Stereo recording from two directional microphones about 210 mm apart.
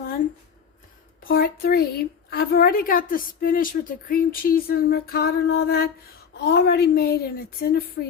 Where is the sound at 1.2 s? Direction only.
45° left (ahead or behind).